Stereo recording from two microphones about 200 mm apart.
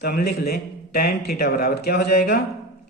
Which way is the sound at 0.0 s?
50° left (ahead or behind).